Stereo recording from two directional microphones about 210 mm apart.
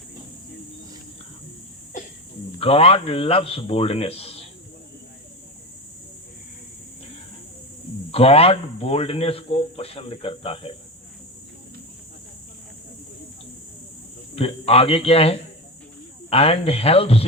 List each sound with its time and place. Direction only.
2.6 s speech: 25° left (ahead or behind)
8.1 s speech: 30° left (ahead or behind)
14.7 s speech: 25° left (ahead or behind)